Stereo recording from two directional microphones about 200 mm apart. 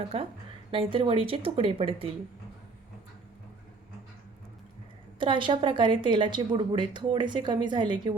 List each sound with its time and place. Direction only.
0.0 s a woman's voice: 30° right (ahead or behind)
5.2 s a woman's voice: 25° right (ahead or behind)